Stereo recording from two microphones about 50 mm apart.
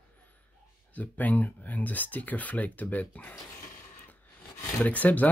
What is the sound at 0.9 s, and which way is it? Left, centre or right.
Speech, left.